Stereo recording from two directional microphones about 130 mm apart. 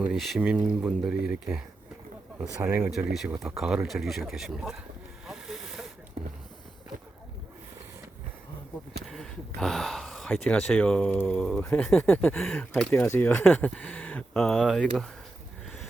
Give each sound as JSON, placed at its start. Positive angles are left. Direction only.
{"t": 0.0, "sound": "speech", "side_deg": -5}
{"t": 2.6, "sound": "speech", "side_deg": -20}
{"t": 3.1, "sound": "speech", "side_deg": 0}
{"t": 5.2, "sound": "vehicle", "side_deg": 0}
{"t": 9.0, "sound": "speech", "side_deg": 0}